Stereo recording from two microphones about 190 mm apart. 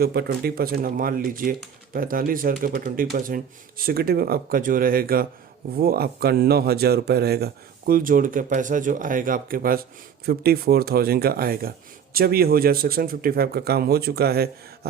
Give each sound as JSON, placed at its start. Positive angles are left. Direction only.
{"t": 0.0, "sound": "speech", "side_deg": -55}